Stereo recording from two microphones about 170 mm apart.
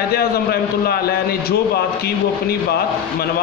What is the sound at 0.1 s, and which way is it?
A man's voice, 65° left (ahead or behind).